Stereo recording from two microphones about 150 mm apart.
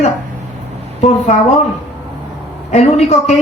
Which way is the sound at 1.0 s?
50° left (ahead or behind).